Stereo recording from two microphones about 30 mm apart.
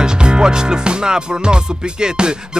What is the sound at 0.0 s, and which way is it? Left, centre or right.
Music, right.